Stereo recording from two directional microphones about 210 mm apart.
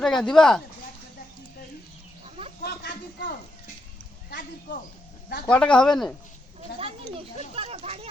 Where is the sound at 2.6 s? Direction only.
50° left (ahead or behind).